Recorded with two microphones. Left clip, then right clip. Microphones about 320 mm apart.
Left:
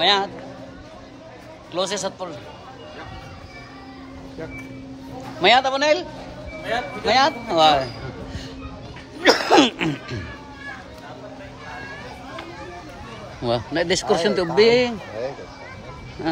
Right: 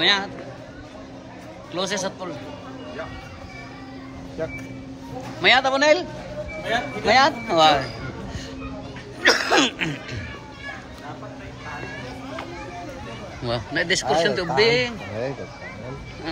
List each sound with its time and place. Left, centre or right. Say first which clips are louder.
0.0 s speech: left 2 dB; centre
1.7 s speech: left 1 dB; centre
5.4 s speech: left 1 dB; centre
9.2 s speech: left 3 dB; left
13.4 s speech: left 3 dB; centre